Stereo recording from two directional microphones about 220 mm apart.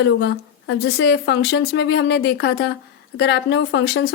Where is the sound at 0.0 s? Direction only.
55° left (ahead or behind).